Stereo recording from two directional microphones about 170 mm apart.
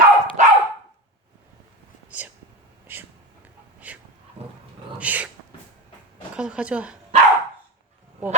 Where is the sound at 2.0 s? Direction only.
10° right (ahead or behind).